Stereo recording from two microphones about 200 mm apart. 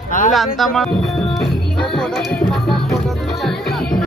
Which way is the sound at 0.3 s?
Centre (ahead or behind).